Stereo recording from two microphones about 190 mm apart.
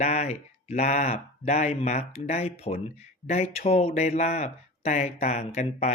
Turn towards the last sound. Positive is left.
turn(degrees=35)  # may be behind; listen again after turning